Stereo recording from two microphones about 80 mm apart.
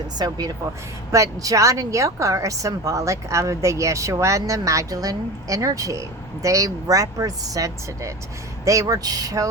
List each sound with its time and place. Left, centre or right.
0.2 s speech: right
1.1 s a woman's voice: right